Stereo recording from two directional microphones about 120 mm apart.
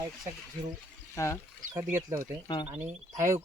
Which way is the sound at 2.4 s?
45° left (ahead or behind).